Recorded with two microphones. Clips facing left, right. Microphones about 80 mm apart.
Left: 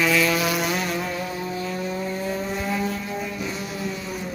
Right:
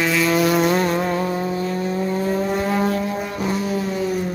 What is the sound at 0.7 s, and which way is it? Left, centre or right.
Vehicle, right.